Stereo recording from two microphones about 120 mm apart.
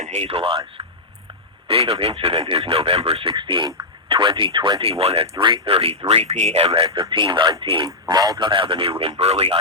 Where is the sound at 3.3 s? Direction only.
40° right (ahead or behind).